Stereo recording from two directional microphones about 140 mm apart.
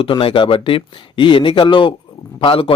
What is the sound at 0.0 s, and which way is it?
A man's voice, 40° left (ahead or behind).